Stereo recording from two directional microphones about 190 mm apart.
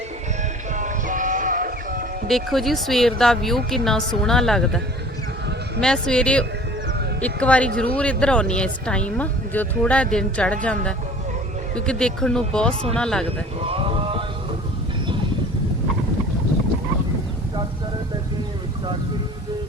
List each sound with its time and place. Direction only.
0.7 s music: 40° right (ahead or behind)
2.2 s speech: centre (ahead or behind)
5.8 s speech: 5° left (ahead or behind)
11.9 s speech: 5° left (ahead or behind)
13.2 s a sound: 30° right (ahead or behind)